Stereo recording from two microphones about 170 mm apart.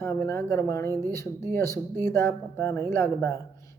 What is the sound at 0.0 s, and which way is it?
Speech, 15° left (ahead or behind).